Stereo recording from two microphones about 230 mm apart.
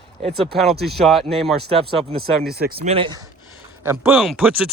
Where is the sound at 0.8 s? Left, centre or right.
Centre.